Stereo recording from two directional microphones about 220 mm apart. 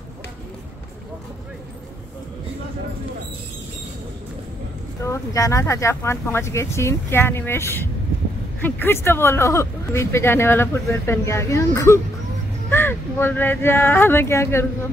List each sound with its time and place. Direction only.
5.0 s speech: 15° left (ahead or behind)